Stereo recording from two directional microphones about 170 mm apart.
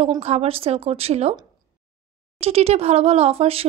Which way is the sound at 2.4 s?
35° right (ahead or behind).